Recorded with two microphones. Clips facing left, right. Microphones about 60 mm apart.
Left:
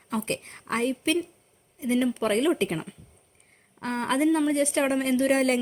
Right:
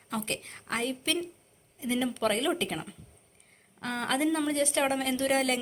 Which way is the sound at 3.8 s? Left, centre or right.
Left.